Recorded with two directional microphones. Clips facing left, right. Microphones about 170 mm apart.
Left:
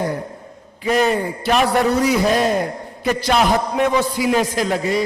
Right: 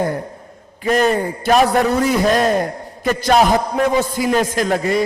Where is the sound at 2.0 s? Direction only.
50° right (ahead or behind).